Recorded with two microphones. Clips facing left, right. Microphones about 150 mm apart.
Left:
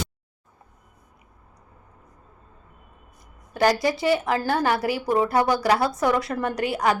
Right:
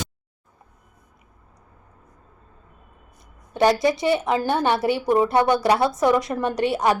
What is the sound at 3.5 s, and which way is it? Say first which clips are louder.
A woman's voice: right 2 dB; 25° right (ahead or behind).